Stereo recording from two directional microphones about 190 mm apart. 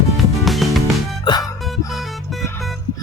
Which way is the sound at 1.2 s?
20° left (ahead or behind).